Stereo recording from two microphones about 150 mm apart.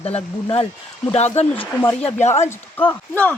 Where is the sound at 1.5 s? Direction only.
15° left (ahead or behind).